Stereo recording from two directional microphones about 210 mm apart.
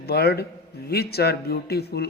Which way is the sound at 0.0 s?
50° left (ahead or behind).